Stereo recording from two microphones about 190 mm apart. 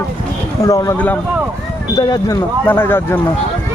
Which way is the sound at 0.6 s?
15° left (ahead or behind).